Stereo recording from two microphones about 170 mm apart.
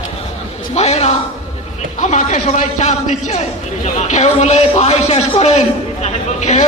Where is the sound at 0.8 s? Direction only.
40° left (ahead or behind).